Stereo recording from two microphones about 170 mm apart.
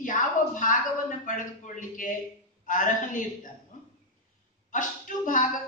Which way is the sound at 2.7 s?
50° left (ahead or behind).